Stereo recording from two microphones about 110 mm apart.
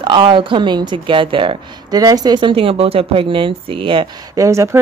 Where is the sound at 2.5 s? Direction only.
55° right (ahead or behind).